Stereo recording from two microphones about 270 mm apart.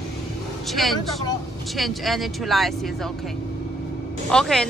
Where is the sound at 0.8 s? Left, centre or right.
Centre.